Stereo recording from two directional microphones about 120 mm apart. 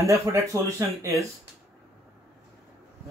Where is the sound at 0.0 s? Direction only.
25° right (ahead or behind).